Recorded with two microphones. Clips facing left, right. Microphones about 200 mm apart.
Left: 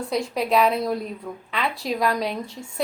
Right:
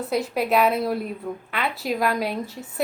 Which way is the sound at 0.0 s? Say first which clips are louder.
Right 1 dB; 5° right (ahead or behind).